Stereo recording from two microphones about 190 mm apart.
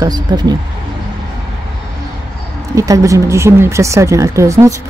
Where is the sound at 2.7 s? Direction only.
15° right (ahead or behind).